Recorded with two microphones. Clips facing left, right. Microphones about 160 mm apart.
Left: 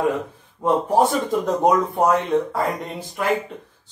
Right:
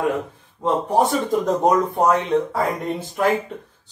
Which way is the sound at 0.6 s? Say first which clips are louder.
Left 1 dB; 5° left (ahead or behind).